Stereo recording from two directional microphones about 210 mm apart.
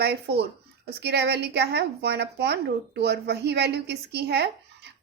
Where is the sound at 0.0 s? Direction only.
50° right (ahead or behind).